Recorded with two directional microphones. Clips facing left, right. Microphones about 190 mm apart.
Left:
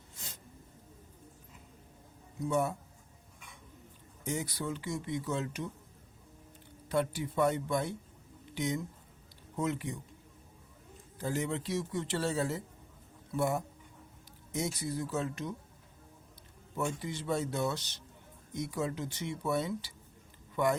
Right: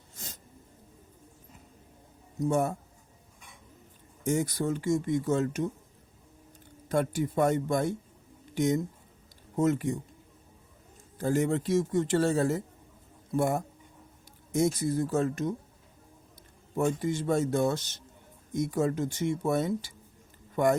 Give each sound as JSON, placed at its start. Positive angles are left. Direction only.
{"t": 2.4, "sound": "speech", "side_deg": -45}
{"t": 4.2, "sound": "speech", "side_deg": -45}
{"t": 6.8, "sound": "speech", "side_deg": -45}
{"t": 11.2, "sound": "speech", "side_deg": -50}
{"t": 16.7, "sound": "speech", "side_deg": -45}